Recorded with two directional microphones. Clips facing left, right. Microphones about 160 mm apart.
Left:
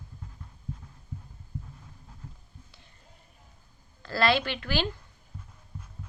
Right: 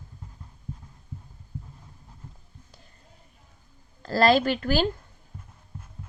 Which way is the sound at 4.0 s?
40° right (ahead or behind).